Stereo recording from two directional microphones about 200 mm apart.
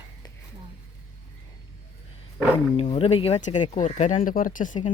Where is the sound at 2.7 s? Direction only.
30° left (ahead or behind).